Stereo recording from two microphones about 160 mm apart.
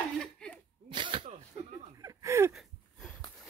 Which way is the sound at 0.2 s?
5° left (ahead or behind).